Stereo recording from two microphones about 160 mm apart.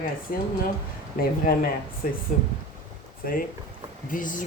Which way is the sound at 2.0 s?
65° left (ahead or behind).